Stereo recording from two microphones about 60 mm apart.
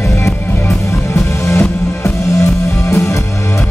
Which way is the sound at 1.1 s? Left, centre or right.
Left.